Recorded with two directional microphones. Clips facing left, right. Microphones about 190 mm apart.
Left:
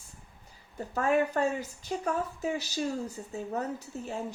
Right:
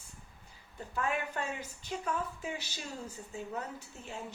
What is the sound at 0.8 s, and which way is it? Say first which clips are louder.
A woman's voice: left 8 dB; 40° left (ahead or behind).